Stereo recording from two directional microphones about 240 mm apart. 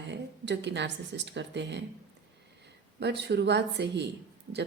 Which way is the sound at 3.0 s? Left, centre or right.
Right.